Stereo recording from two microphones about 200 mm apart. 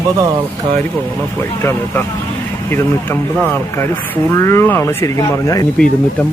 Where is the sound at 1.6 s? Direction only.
10° left (ahead or behind).